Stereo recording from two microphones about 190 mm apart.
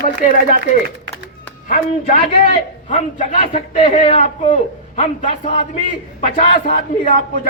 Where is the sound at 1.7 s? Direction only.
45° left (ahead or behind).